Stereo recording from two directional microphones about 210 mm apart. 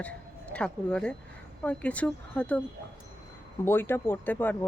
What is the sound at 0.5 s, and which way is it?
Speech, 5° left (ahead or behind).